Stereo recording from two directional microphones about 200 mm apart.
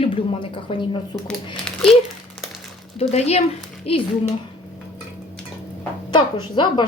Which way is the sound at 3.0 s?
30° left (ahead or behind).